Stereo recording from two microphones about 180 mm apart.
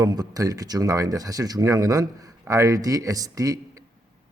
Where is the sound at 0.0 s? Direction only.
20° right (ahead or behind).